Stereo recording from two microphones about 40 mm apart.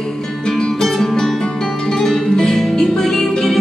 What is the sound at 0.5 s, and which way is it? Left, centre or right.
Music, centre.